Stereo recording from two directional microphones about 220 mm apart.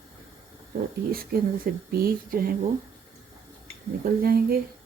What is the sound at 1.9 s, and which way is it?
Speech, 40° right (ahead or behind).